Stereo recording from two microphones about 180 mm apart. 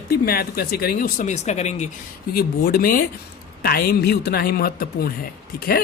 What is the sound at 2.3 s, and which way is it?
Speech, 55° left (ahead or behind).